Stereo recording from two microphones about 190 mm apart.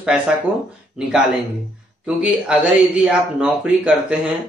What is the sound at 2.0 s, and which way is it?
A man's voice, 5° right (ahead or behind).